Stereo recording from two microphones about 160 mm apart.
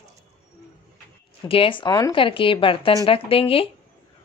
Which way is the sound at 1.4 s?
35° left (ahead or behind).